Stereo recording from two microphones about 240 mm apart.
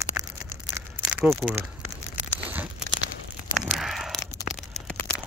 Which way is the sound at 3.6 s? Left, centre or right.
Centre.